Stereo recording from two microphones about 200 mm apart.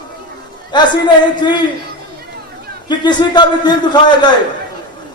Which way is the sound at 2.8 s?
20° left (ahead or behind).